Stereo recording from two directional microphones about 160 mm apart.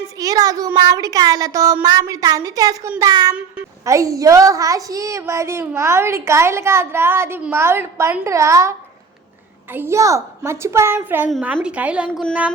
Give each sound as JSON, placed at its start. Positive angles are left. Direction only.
{"t": 0.2, "sound": "a woman's voice", "side_deg": -25}
{"t": 9.7, "sound": "a woman's voice", "side_deg": -15}